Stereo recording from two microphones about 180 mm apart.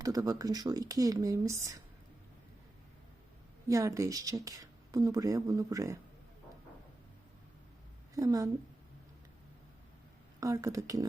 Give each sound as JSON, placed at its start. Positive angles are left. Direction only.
{"t": 0.0, "sound": "speech", "side_deg": -20}
{"t": 3.7, "sound": "speech", "side_deg": -15}
{"t": 8.1, "sound": "speech", "side_deg": -20}
{"t": 10.4, "sound": "speech", "side_deg": -20}